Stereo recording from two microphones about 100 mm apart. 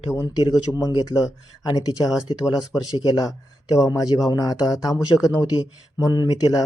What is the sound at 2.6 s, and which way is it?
Speech, 5° right (ahead or behind).